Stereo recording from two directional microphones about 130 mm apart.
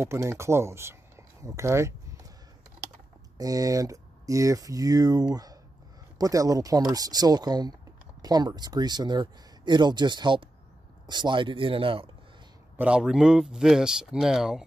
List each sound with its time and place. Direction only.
0.0 s speech: 20° right (ahead or behind)
3.3 s speech: 25° right (ahead or behind); by 12.1 s 45° right (ahead or behind)
12.7 s speech: 10° right (ahead or behind)